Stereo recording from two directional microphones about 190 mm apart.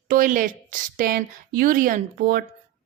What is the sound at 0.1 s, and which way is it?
A woman's voice, 45° right (ahead or behind).